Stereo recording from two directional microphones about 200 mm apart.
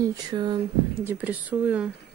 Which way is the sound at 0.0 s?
20° right (ahead or behind).